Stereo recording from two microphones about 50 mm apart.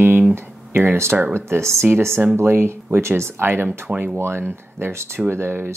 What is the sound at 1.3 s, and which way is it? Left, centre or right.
Speech, right.